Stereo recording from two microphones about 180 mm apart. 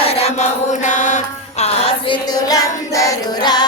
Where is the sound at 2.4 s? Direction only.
20° left (ahead or behind).